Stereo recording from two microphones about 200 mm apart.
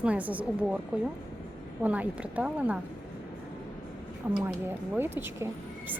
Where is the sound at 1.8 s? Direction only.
5° right (ahead or behind).